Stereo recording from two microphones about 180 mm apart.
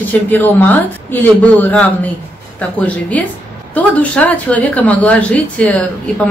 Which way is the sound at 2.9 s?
10° left (ahead or behind).